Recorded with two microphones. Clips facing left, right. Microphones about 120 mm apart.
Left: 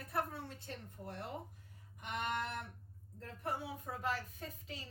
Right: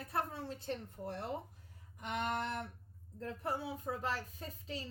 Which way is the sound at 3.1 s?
35° right (ahead or behind).